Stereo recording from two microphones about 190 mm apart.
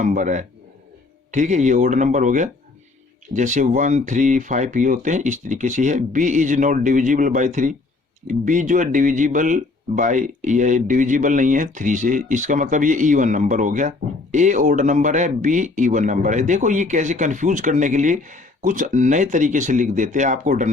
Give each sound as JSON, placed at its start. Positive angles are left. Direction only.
{"t": 0.0, "sound": "speech", "side_deg": -40}